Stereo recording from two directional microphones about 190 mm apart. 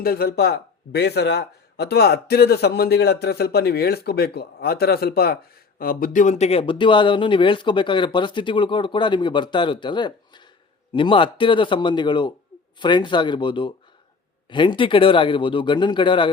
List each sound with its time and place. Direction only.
0.0 s speech: 55° left (ahead or behind); by 16.3 s 25° left (ahead or behind)